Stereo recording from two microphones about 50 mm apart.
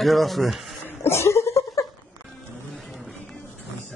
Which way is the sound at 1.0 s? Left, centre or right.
Left.